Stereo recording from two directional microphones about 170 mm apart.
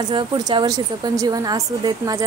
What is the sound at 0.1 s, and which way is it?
Speech, 25° right (ahead or behind).